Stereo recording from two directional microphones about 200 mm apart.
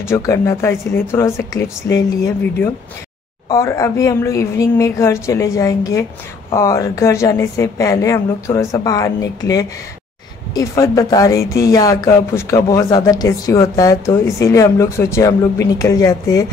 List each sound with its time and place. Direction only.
0.1 s speech: 15° left (ahead or behind)
3.4 s speech: 15° left (ahead or behind)